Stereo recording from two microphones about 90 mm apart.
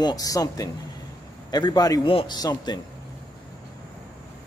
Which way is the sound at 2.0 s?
90° left.